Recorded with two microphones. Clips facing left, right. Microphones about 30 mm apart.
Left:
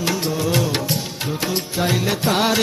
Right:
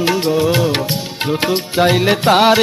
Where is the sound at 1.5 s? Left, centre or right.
Right.